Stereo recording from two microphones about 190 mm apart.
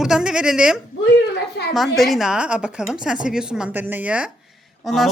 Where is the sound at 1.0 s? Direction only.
65° left (ahead or behind).